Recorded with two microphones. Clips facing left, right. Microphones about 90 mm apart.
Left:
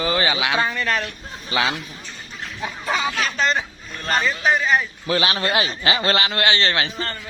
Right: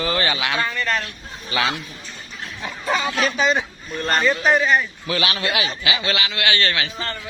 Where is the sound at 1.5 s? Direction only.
25° left (ahead or behind).